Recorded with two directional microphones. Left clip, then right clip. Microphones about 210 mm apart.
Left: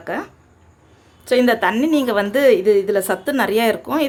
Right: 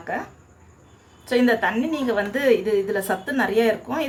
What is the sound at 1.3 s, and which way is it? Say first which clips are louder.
A woman's voice: left 4 dB; 45° left (ahead or behind).